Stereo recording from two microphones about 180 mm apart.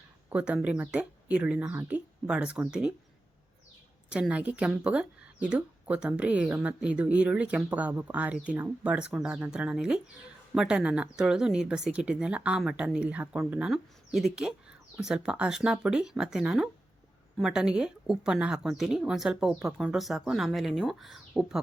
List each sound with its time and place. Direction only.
0.3 s a woman's voice: 5° right (ahead or behind)
4.1 s a woman's voice: 5° right (ahead or behind)